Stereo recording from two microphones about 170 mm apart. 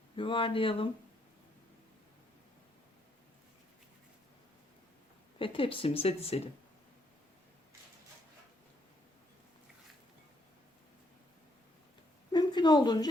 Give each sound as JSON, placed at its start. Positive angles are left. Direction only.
{"t": 0.2, "sound": "speech", "side_deg": 30}
{"t": 5.4, "sound": "speech", "side_deg": 30}
{"t": 12.3, "sound": "a sound", "side_deg": 25}